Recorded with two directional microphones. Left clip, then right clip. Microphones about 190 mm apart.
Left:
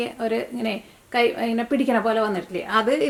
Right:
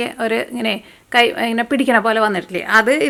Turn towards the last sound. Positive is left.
turn(degrees=-20)  # may be behind; listen again after turning